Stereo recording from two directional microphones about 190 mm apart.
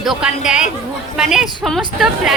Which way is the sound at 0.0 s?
5° right (ahead or behind).